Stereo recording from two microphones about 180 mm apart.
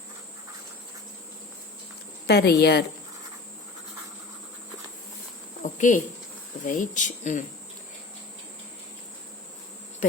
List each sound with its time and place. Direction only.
2.2 s speech: 60° left (ahead or behind)
5.6 s cricket: 45° left (ahead or behind)
6.7 s speech: 45° left (ahead or behind)